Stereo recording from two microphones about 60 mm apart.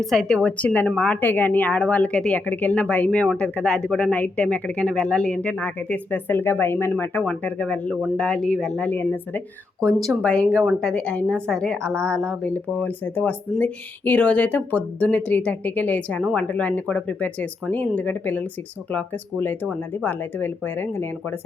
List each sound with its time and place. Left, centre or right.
0.0 s a woman's voice: centre
0.3 s speech: left
0.9 s speech: centre
1.2 s speech: left
3.3 s speech: centre; by 6.9 s left
7.2 s speech: left
8.9 s speech: left
9.8 s a woman's voice: centre
10.2 s speech: left
10.8 s speech: centre
11.0 s speech: left